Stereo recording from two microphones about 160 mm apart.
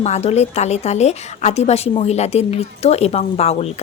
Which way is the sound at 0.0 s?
40° left (ahead or behind).